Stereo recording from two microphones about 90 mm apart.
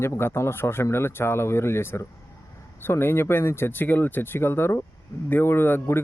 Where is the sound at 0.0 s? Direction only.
25° left (ahead or behind).